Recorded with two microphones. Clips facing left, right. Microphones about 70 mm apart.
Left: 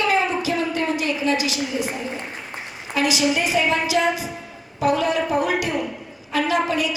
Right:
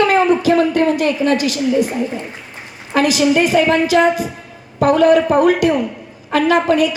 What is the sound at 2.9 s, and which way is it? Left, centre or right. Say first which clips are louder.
A woman's voice: right 7 dB; right.